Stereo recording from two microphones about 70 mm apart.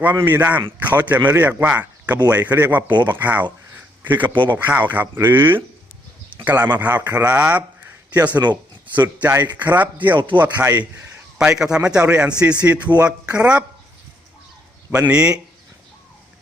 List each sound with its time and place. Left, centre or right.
0.2 s a man's voice: right
11.3 s a man's voice: centre
14.8 s speech: right
15.1 s a man's voice: centre